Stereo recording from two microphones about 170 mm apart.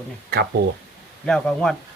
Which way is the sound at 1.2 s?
5° left (ahead or behind).